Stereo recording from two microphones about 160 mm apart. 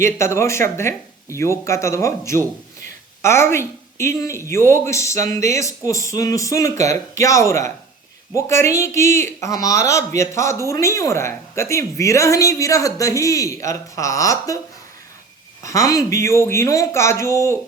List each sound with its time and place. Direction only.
0.0 s speech: 15° left (ahead or behind)
15.6 s speech: 20° left (ahead or behind)